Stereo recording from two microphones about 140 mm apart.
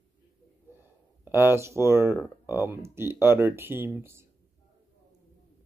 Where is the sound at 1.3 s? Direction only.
15° right (ahead or behind).